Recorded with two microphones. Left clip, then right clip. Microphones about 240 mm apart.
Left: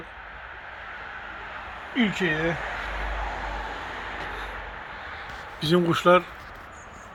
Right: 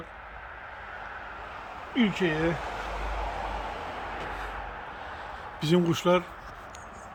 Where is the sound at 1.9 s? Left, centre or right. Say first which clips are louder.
Left 2 dB; centre.